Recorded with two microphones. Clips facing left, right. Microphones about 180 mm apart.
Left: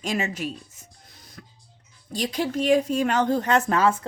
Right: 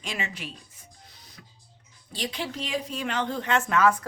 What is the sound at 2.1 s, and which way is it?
Speech, 45° left (ahead or behind).